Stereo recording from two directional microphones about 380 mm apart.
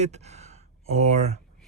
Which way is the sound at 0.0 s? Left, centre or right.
Centre.